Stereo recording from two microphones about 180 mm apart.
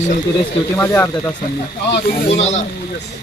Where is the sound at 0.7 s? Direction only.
10° left (ahead or behind).